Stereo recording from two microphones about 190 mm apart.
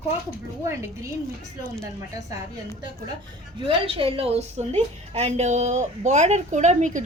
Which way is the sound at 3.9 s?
30° right (ahead or behind).